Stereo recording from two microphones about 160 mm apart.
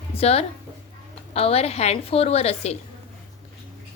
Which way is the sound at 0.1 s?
40° left (ahead or behind).